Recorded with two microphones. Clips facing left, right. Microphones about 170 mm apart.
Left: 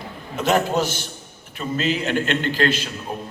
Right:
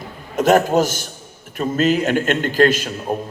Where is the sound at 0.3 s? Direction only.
45° right (ahead or behind).